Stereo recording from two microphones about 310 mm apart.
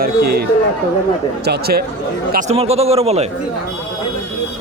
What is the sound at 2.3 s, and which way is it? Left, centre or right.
Speech, right.